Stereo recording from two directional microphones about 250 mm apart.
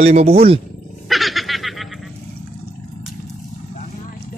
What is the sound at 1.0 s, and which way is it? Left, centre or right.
Snicker, centre.